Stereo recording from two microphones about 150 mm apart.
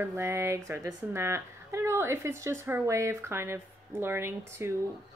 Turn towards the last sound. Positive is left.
turn(degrees=-15)  # may be behind; listen again after turning